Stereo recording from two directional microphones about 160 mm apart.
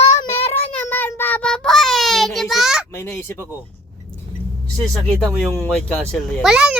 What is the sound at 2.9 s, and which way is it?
Speech, 15° left (ahead or behind).